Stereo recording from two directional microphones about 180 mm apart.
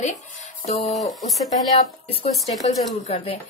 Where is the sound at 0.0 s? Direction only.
40° left (ahead or behind).